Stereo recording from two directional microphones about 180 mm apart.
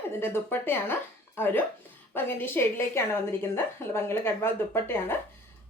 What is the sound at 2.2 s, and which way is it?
A woman's voice, 10° left (ahead or behind).